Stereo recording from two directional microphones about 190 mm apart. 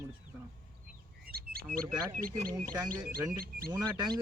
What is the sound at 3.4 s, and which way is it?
Speech, 50° right (ahead or behind).